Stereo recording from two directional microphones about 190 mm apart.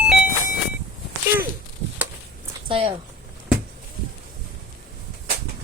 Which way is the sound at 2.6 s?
30° right (ahead or behind).